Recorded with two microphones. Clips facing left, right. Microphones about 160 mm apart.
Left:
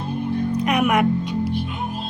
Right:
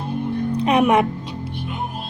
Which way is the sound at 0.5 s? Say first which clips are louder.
Right 4 dB; 30° right (ahead or behind).